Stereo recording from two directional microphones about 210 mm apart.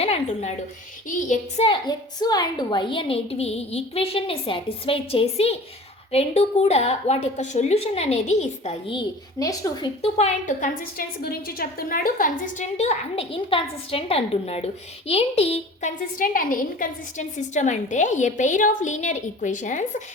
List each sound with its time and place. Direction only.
0.0 s a woman's voice: 30° left (ahead or behind)